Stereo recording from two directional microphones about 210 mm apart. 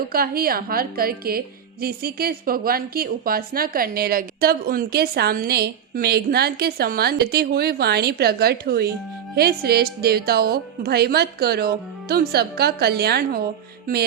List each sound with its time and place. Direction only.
0.1 s a woman's voice: 45° right (ahead or behind)